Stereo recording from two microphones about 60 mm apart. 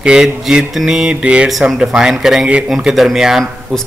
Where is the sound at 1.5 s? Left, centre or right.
Centre.